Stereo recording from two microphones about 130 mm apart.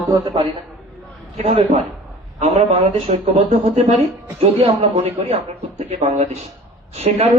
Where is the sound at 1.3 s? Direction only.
55° right (ahead or behind).